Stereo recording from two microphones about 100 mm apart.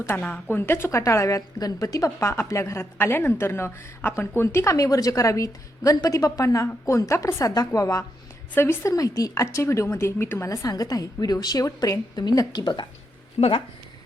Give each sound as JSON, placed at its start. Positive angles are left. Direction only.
{"t": 0.2, "sound": "a woman's voice", "side_deg": 20}
{"t": 13.4, "sound": "speech", "side_deg": 55}